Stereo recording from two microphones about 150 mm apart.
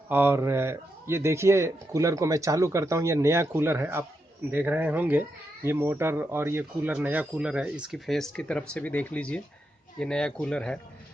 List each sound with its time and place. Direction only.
0.1 s a man's voice: 15° right (ahead or behind); by 10.8 s 5° left (ahead or behind)